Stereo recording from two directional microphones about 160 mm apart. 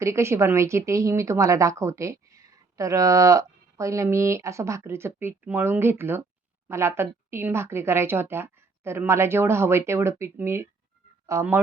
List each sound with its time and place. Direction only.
0.0 s a woman's voice: 15° right (ahead or behind)